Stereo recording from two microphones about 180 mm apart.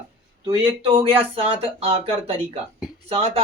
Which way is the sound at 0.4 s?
25° right (ahead or behind).